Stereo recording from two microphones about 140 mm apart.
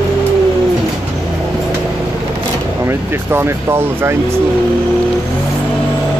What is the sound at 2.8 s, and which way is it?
Speech, 20° right (ahead or behind).